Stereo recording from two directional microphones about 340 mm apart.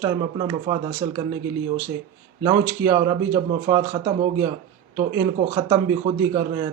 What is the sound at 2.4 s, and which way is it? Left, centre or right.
Speech, centre.